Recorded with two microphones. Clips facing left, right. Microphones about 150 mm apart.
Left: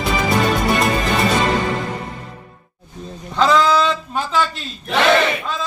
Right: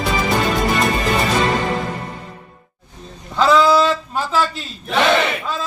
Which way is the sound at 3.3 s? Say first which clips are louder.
Right 1 dB; 5° right (ahead or behind).